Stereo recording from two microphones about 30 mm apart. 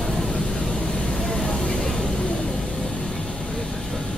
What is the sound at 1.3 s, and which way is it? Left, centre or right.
Vehicle, left.